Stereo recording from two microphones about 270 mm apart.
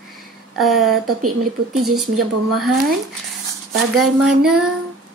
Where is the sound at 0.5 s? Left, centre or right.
Centre.